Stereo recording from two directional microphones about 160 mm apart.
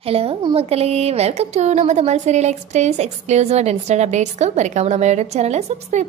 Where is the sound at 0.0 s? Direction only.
35° right (ahead or behind).